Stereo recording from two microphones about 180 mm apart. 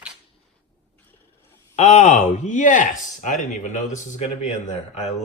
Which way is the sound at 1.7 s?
40° left (ahead or behind).